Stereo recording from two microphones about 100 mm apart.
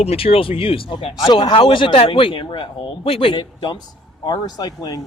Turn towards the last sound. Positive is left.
turn(degrees=40)  # may be behind; listen again after turning